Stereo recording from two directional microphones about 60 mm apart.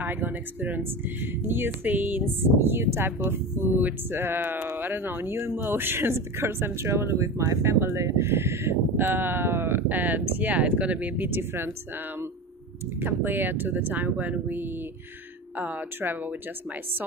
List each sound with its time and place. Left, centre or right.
0.0 s speech: right
11.2 s speech: right
13.0 s speech: right